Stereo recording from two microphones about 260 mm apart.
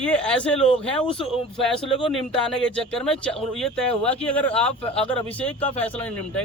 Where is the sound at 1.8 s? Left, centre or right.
Centre.